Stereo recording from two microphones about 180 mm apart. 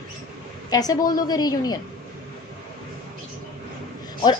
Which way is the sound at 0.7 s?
20° left (ahead or behind).